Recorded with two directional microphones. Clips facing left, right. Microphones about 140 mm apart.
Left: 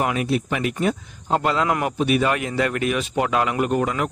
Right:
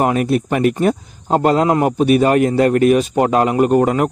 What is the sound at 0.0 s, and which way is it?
Speech, 45° right (ahead or behind).